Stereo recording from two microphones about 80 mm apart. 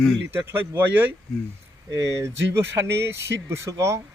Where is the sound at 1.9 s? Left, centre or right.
Right.